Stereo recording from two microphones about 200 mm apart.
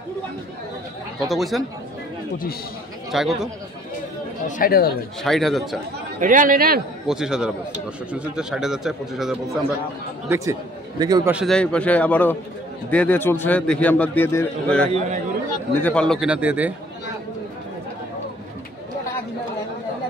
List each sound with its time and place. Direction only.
1.3 s speech: centre (ahead or behind)
3.1 s speech: centre (ahead or behind)
4.5 s speech: 45° left (ahead or behind)
5.2 s speech: centre (ahead or behind)
6.1 s a man's voice: 40° right (ahead or behind)
7.1 s speech: 5° right (ahead or behind)
10.2 s a man's voice: 15° right (ahead or behind)
11.3 s a man's voice: centre (ahead or behind)
14.9 s a man's voice: 30° right (ahead or behind)
15.7 s speech: 5° left (ahead or behind)